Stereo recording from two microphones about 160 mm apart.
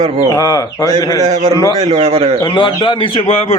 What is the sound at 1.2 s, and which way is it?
A man's voice, 40° right (ahead or behind).